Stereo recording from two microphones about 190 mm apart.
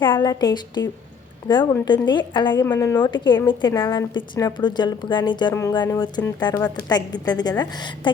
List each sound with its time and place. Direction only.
0.1 s a woman's voice: 20° left (ahead or behind)
2.5 s a woman's voice: 10° left (ahead or behind)